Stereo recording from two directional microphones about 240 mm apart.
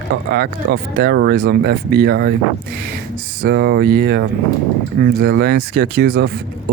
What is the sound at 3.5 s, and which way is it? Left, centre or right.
Speech, right.